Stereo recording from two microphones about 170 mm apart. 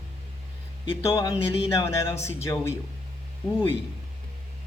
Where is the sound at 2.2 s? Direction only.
40° left (ahead or behind).